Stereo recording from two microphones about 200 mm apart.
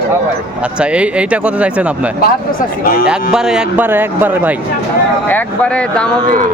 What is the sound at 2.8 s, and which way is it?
Speech, 45° left (ahead or behind).